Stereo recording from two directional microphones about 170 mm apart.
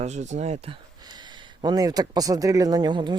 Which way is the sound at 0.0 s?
40° right (ahead or behind).